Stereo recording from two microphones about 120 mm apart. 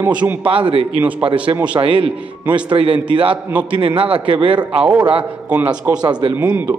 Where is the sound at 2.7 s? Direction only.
50° right (ahead or behind).